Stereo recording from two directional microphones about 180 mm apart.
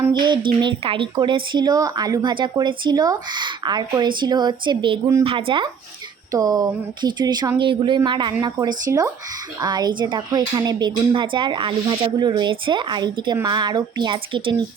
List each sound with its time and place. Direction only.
0.1 s speech: 25° right (ahead or behind)